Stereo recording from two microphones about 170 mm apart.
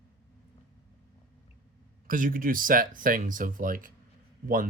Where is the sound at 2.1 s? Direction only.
55° right (ahead or behind).